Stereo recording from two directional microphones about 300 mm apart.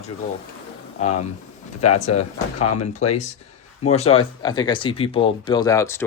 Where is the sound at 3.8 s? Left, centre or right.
Left.